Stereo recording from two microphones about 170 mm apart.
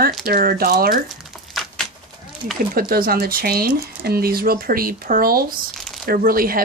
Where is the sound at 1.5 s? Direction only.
Centre (ahead or behind).